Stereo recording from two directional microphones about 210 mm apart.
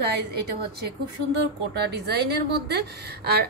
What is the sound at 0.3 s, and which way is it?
A woman's voice, 50° right (ahead or behind).